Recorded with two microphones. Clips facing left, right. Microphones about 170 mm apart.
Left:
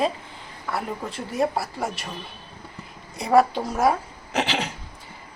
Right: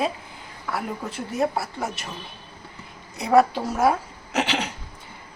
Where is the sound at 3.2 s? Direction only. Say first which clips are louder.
Even; centre (ahead or behind).